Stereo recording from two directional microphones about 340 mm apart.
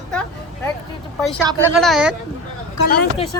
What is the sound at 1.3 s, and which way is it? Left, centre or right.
Speech, centre.